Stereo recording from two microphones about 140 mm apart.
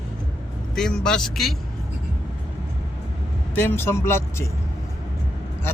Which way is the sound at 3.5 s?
15° left (ahead or behind).